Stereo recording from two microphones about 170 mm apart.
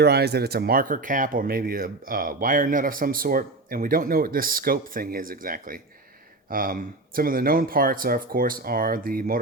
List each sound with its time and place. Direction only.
0.0 s speech: 70° right (ahead or behind)